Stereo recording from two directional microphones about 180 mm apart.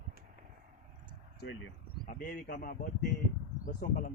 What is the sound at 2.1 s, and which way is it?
Speech, 50° left (ahead or behind).